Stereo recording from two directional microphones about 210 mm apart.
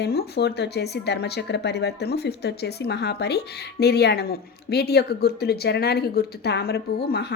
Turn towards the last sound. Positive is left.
turn(degrees=50)  # may be behind; listen again after turning